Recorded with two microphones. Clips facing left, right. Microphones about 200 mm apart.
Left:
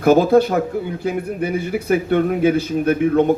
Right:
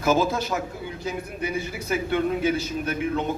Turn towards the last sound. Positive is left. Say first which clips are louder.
# left 11 dB
turn(degrees=55)  # may be behind; listen again after turning